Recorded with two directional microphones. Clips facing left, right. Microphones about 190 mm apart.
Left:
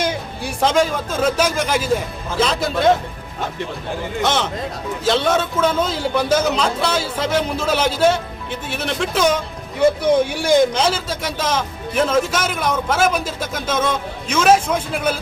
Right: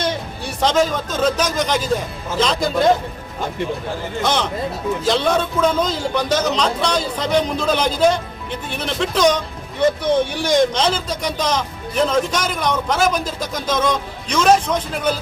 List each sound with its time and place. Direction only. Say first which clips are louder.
0.0 s a man's voice: left 1 dB; 10° left (ahead or behind)
4.2 s a man's voice: even; centre (ahead or behind)